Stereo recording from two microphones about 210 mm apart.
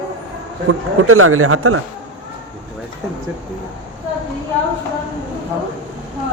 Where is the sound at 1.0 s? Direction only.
90° right.